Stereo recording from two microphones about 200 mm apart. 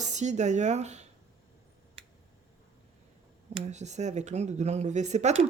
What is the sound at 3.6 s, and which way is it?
Speech, 35° right (ahead or behind).